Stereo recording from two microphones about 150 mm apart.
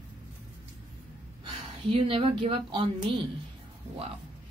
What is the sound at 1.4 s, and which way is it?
Speech, 35° right (ahead or behind).